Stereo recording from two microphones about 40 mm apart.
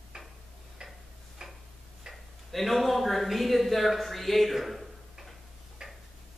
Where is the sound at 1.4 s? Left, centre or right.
Centre.